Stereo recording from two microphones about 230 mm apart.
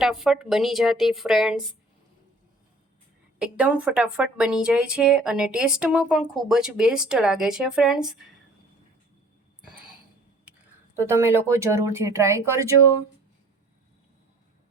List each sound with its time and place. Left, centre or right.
0.0 s speech: centre
3.3 s speech: centre
10.9 s speech: centre